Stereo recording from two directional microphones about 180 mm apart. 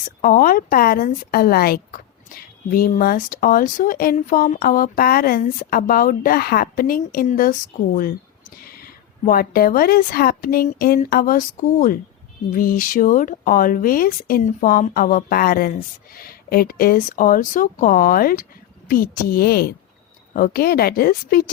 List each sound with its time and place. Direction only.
0.2 s speech: 50° left (ahead or behind)
8.6 s speech: 55° left (ahead or behind)